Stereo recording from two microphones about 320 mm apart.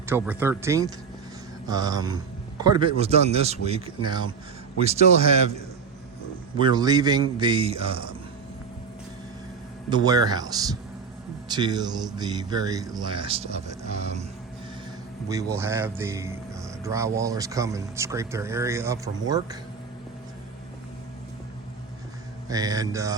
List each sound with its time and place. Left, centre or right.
0.0 s a man's voice: centre
9.9 s speech: centre
15.3 s speech: centre
22.4 s speech: centre